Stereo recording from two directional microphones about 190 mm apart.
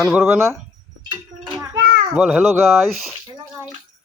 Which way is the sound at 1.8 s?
50° right (ahead or behind).